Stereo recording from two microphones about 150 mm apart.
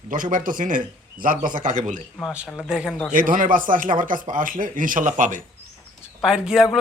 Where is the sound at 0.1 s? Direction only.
60° right (ahead or behind).